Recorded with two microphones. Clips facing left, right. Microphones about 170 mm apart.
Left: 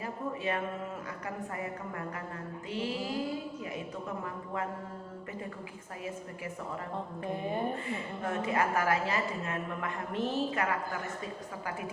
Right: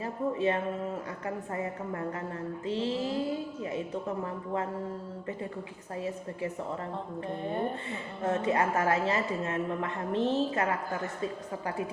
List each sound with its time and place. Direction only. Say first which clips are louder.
0.0 s speech: right 6 dB; 30° right (ahead or behind)
2.6 s a woman's voice: right 4 dB; 30° right (ahead or behind)
7.3 s speech: even; 5° left (ahead or behind)
7.9 s a woman's voice: right 3 dB; 30° right (ahead or behind)